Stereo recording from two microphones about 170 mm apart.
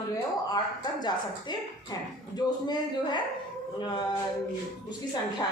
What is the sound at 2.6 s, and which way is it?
Speech, 25° left (ahead or behind).